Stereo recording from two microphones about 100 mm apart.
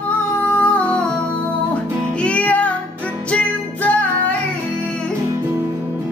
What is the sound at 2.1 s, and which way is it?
Music, 10° left (ahead or behind).